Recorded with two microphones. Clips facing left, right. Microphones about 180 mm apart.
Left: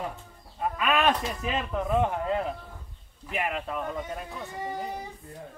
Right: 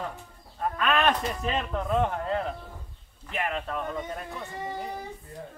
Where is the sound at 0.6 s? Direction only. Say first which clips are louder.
Even; 10° left (ahead or behind).